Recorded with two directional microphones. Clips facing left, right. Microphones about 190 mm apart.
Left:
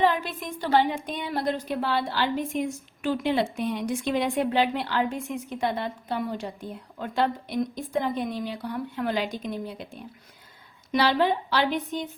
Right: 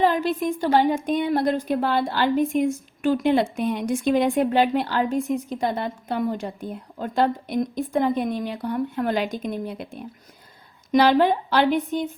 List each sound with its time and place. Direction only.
0.0 s a woman's voice: 45° right (ahead or behind)
10.9 s a woman's voice: 50° right (ahead or behind)